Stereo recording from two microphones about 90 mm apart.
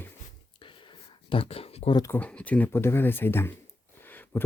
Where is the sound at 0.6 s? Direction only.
65° left (ahead or behind); by 1.9 s 90° left.